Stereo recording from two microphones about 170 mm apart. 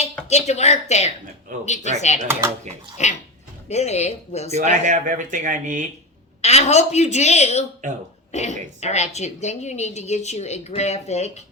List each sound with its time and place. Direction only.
0.3 s a woman's voice: 40° left (ahead or behind)
2.2 s speech: 15° right (ahead or behind)
3.0 s a woman's voice: 40° left (ahead or behind)
4.5 s speech: 45° right (ahead or behind)
6.4 s a woman's voice: 40° left (ahead or behind)
7.8 s speech: 45° right (ahead or behind)
8.3 s a woman's voice: 40° left (ahead or behind)